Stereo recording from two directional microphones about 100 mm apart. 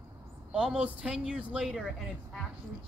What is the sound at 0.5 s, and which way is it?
Speech, 10° right (ahead or behind).